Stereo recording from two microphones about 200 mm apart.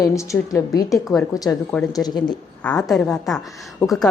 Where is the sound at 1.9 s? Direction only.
20° left (ahead or behind).